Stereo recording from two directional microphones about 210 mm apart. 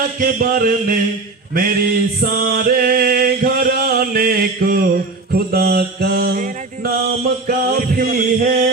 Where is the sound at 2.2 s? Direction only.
45° right (ahead or behind).